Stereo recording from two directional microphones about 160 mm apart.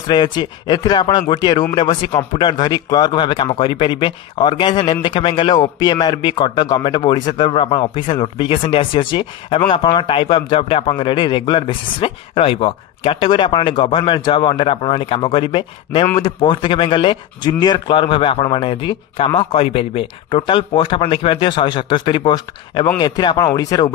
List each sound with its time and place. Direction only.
0.0 s speech: 30° left (ahead or behind)